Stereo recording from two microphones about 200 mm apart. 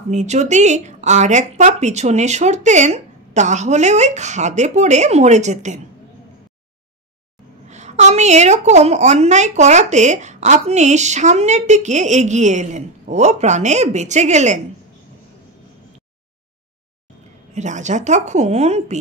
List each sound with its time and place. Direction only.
0.1 s a woman's voice: 35° right (ahead or behind)
7.6 s a woman's voice: 35° right (ahead or behind)
17.6 s a woman's voice: 35° right (ahead or behind)